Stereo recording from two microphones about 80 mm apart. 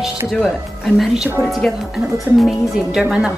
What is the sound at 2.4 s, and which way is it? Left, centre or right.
Speech, centre.